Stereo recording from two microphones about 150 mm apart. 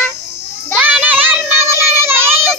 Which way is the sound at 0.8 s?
10° right (ahead or behind).